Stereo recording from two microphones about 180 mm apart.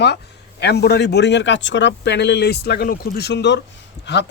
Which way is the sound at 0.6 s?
65° left (ahead or behind).